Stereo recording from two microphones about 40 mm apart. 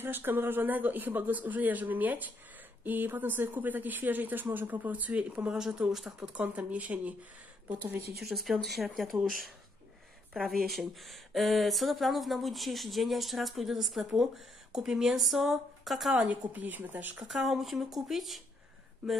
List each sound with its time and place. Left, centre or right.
0.0 s speech: right
4.9 s speech: right
5.3 s speech: right
5.6 s speech: centre
6.4 s speech: right
8.2 s speech: centre
10.4 s speech: centre
16.3 s speech: right
17.2 s speech: centre